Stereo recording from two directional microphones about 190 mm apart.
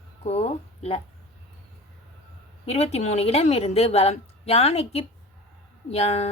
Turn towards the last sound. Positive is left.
turn(degrees=35)  # may be behind; listen again after turning